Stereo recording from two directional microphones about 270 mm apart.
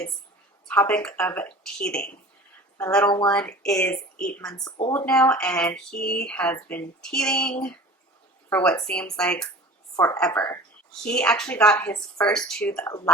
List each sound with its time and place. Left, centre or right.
0.7 s speech: centre
5.9 s speech: left
6.2 s a woman's voice: centre